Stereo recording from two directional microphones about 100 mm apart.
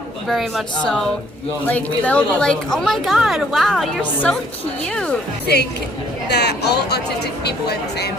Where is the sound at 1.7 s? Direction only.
15° left (ahead or behind).